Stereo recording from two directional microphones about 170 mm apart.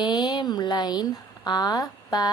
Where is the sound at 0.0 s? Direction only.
25° left (ahead or behind).